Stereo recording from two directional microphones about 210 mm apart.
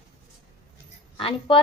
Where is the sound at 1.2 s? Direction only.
25° left (ahead or behind).